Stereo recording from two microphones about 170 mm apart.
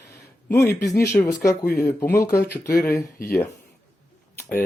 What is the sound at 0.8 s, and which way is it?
Speech, 20° left (ahead or behind).